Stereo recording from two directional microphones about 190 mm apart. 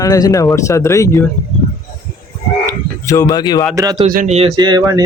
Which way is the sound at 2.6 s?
15° left (ahead or behind).